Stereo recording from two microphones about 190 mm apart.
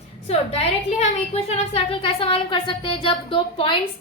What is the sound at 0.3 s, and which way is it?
A woman's voice, 35° left (ahead or behind).